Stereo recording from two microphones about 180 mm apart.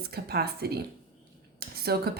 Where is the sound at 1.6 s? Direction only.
60° right (ahead or behind).